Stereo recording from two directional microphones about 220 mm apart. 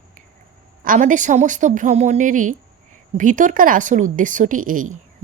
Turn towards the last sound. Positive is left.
turn(degrees=-35)  # may be behind; listen again after turning